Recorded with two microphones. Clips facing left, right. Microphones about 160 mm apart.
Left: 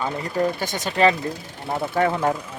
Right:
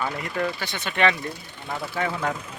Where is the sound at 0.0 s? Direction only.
30° left (ahead or behind).